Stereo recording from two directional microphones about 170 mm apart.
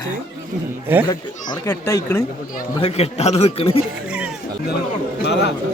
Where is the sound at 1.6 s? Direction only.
20° left (ahead or behind).